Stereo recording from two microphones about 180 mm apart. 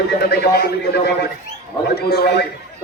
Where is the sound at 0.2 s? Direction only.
60° left (ahead or behind).